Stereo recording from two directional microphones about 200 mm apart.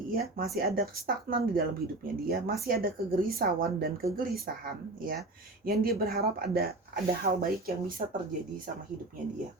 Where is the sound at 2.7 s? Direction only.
45° right (ahead or behind).